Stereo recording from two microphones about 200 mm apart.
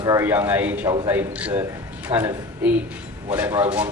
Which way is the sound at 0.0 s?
15° right (ahead or behind).